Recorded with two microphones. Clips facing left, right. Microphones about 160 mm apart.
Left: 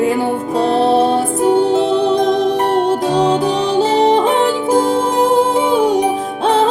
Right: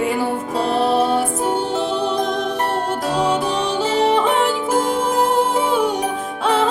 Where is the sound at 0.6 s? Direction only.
35° left (ahead or behind).